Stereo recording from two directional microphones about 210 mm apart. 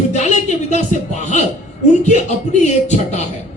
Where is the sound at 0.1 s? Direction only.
35° left (ahead or behind).